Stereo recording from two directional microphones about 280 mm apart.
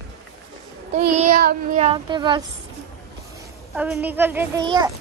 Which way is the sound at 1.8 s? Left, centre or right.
Centre.